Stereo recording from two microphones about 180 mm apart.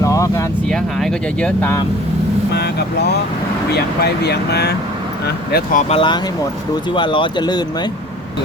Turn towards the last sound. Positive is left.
turn(degrees=25)  # may be behind; listen again after turning